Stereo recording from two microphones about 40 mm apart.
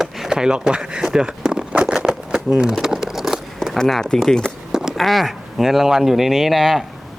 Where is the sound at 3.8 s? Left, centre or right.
Centre.